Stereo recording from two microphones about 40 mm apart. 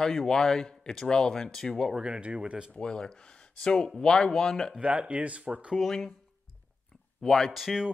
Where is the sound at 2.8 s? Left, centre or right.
Centre.